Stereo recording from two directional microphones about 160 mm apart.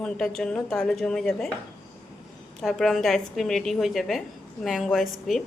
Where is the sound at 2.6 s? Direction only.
Centre (ahead or behind).